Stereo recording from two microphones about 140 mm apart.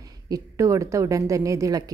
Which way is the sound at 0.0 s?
25° right (ahead or behind).